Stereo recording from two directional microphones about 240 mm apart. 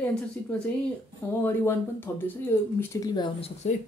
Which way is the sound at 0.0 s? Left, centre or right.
Centre.